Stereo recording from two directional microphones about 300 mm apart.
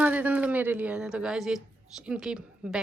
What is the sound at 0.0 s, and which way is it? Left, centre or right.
A woman's voice, centre.